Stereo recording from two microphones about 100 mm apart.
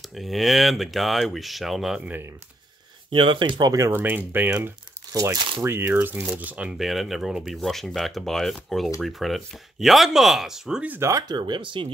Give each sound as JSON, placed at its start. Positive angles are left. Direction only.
{"t": 0.1, "sound": "speech", "side_deg": 0}
{"t": 2.0, "sound": "speech", "side_deg": -15}
{"t": 3.1, "sound": "speech", "side_deg": -60}
{"t": 3.7, "sound": "speech", "side_deg": -30}
{"t": 4.0, "sound": "speech", "side_deg": -20}
{"t": 5.1, "sound": "speech", "side_deg": -35}
{"t": 5.6, "sound": "speech", "side_deg": -25}
{"t": 10.9, "sound": "speech", "side_deg": -30}
{"t": 11.2, "sound": "speech", "side_deg": -50}